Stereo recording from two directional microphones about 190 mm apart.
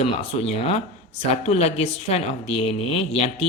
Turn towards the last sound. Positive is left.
turn(degrees=30)  # may be behind; listen again after turning